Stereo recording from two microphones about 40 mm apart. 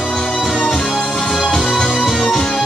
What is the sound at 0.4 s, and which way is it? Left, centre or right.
Music, centre.